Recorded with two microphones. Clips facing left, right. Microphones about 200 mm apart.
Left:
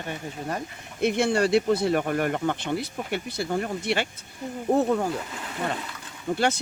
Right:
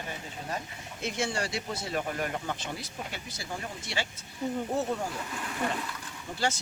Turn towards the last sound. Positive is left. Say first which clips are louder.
# left 6 dB
turn(degrees=60)  # may be behind; listen again after turning